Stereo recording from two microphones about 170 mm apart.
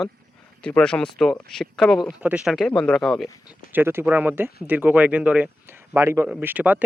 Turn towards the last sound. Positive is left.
turn(degrees=-10)  # may be behind; listen again after turning